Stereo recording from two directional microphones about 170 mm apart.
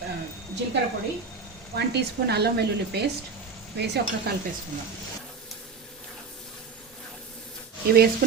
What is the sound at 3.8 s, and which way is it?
Speech, 80° right.